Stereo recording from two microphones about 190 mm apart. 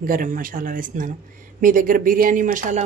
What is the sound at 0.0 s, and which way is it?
Speech, 45° right (ahead or behind).